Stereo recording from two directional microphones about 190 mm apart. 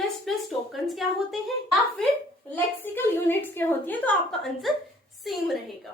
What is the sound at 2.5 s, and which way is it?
A woman's voice, 10° left (ahead or behind).